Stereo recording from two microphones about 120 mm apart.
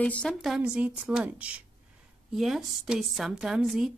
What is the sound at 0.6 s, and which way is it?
A woman's voice, 10° right (ahead or behind).